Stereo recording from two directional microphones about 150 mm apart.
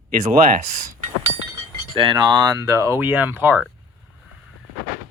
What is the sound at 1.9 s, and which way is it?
Speech, 30° right (ahead or behind).